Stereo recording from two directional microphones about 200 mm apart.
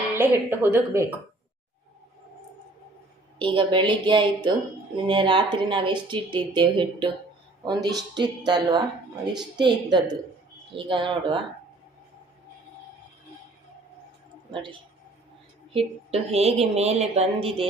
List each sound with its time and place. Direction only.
0.2 s speech: 10° right (ahead or behind)
3.3 s speech: 25° right (ahead or behind)
14.5 s a woman's voice: 25° right (ahead or behind)